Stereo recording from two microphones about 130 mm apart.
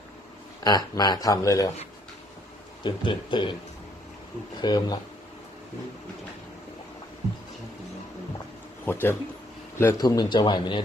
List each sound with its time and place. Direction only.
0.6 s speech: 30° left (ahead or behind)
2.8 s speech: 40° left (ahead or behind)
4.6 s speech: 30° left (ahead or behind)
8.8 s speech: 15° left (ahead or behind)
9.8 s speech: 30° left (ahead or behind)